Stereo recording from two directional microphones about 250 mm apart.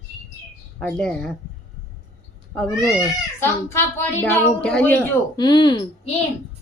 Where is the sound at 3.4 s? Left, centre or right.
Centre.